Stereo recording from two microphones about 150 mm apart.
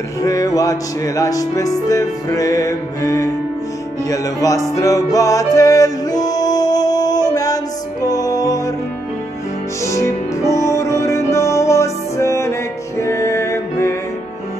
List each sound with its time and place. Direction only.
0.2 s music: 25° left (ahead or behind)
9.8 s music: 20° left (ahead or behind)